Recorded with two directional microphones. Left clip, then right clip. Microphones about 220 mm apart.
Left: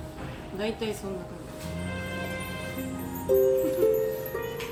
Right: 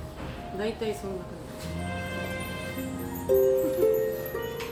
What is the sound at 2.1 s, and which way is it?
Music, centre (ahead or behind).